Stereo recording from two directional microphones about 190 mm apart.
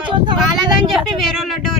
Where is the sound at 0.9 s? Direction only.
Centre (ahead or behind).